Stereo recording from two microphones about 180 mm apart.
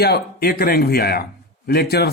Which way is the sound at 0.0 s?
60° left (ahead or behind).